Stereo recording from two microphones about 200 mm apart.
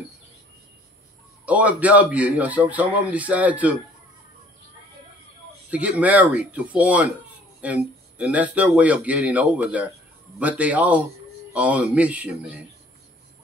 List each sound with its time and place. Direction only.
1.4 s a man's voice: 5° right (ahead or behind)
5.7 s a man's voice: 5° right (ahead or behind)